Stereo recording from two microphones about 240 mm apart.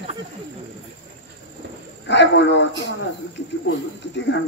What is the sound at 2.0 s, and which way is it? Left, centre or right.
Speech, left.